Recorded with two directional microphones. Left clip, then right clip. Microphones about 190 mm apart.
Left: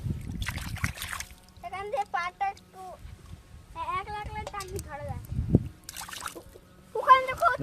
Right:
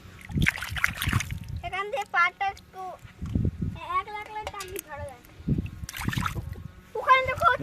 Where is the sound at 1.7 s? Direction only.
30° right (ahead or behind).